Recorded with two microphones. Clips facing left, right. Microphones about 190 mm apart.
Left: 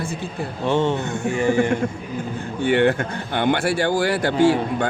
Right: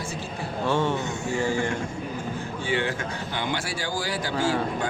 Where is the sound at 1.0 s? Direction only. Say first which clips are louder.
Left 5 dB; 60° left (ahead or behind).